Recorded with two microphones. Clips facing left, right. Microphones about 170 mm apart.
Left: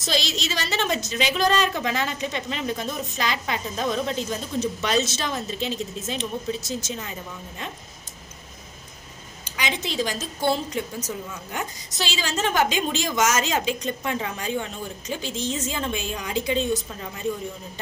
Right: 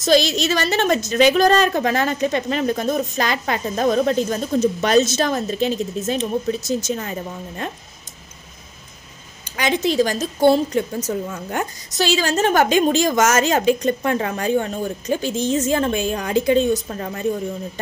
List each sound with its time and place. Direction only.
0.0 s a woman's voice: 50° right (ahead or behind)
9.4 s a woman's voice: 50° right (ahead or behind)